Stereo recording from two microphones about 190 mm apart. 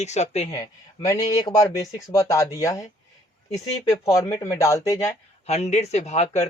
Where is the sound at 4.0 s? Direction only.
15° left (ahead or behind).